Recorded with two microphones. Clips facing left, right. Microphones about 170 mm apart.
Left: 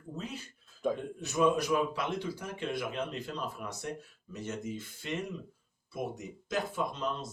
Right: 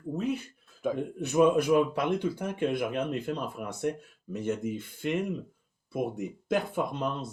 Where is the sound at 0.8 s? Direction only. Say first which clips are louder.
Right 1 dB; 5° right (ahead or behind).